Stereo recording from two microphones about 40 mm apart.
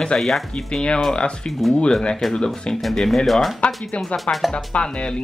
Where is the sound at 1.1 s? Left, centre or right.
Left.